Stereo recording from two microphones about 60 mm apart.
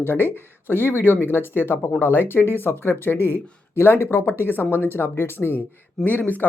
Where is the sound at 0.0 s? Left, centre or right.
Left.